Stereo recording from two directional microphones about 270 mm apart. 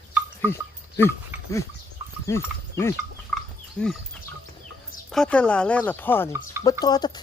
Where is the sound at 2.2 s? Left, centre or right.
Centre.